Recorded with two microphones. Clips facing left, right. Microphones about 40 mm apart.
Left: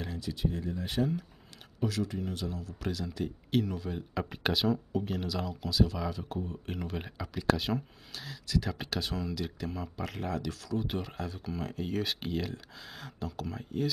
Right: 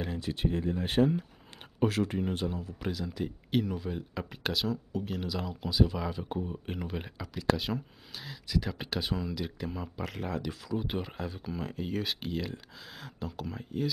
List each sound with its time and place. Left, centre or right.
0.1 s speech: right; by 2.9 s centre
2.9 s speech: centre